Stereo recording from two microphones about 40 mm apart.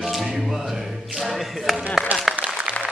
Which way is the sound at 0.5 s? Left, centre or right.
Centre.